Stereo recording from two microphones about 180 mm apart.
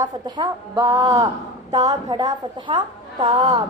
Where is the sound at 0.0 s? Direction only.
25° right (ahead or behind).